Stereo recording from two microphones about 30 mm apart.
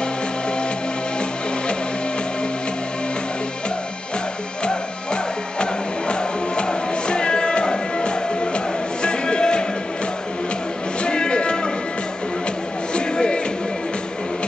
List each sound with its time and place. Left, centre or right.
4.6 s music: left
11.1 s music: left
12.9 s music: left